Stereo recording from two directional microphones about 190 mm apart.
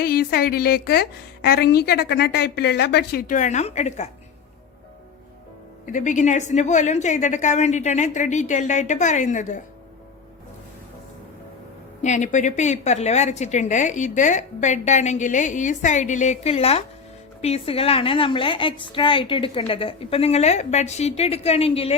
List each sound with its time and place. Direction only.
0.0 s a woman's voice: 50° left (ahead or behind); by 4.1 s 35° left (ahead or behind)
5.8 s a woman's voice: 40° left (ahead or behind)
12.0 s a woman's voice: 40° left (ahead or behind)